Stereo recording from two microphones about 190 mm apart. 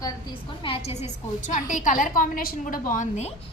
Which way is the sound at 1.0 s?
45° left (ahead or behind).